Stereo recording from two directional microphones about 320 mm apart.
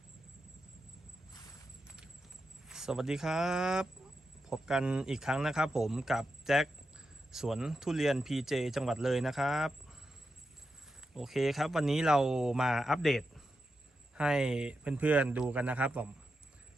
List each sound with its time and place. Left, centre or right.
1.3 s a sound: centre
2.6 s speech: centre
11.1 s speech: centre